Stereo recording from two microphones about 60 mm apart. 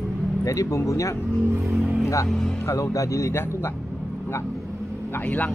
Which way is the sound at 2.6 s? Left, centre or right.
Left.